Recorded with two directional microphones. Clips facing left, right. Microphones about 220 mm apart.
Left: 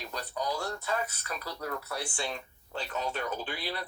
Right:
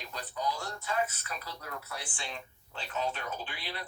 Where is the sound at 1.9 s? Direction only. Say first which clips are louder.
Left 6 dB; 40° left (ahead or behind).